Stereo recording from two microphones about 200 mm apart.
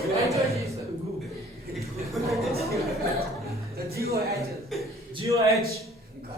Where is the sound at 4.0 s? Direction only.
50° right (ahead or behind).